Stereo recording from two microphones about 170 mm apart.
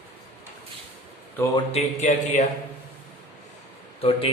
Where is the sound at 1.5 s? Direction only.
40° left (ahead or behind).